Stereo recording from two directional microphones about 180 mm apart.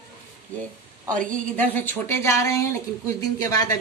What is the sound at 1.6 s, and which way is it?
Speech, 10° left (ahead or behind).